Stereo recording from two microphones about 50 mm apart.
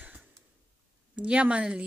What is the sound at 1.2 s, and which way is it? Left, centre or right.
Speech, right.